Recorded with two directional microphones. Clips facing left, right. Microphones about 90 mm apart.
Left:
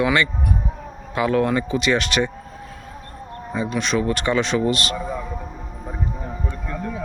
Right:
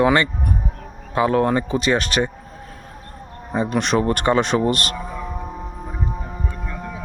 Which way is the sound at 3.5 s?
50° right (ahead or behind).